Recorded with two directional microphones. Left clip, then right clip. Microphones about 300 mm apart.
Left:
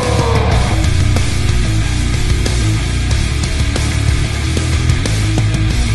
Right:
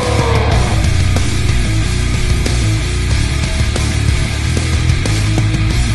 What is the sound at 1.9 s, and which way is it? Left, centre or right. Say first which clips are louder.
Music: even; centre.